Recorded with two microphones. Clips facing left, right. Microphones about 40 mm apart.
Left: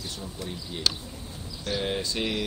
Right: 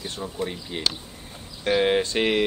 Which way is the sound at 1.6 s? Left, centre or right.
Right.